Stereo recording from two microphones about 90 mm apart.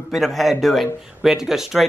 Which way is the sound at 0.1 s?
Centre (ahead or behind).